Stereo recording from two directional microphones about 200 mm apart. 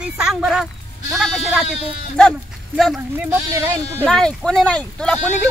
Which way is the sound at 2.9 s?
15° right (ahead or behind).